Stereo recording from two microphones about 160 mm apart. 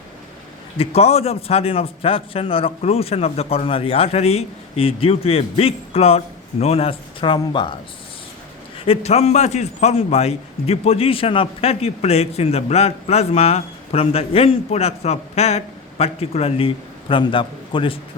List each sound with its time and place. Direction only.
0.8 s a man's voice: 40° left (ahead or behind)
8.8 s a man's voice: 40° left (ahead or behind)